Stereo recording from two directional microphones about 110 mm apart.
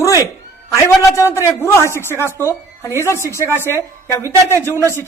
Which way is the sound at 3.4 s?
25° right (ahead or behind).